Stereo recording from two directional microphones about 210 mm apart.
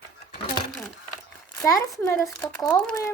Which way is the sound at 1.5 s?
15° left (ahead or behind).